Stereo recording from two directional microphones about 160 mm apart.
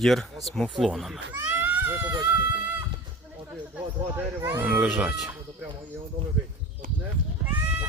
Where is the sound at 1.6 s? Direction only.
10° right (ahead or behind).